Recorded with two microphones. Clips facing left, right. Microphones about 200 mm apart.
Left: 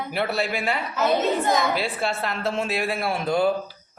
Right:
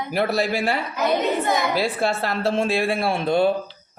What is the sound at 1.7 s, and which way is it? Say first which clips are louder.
A man's voice: right 4 dB; 40° right (ahead or behind).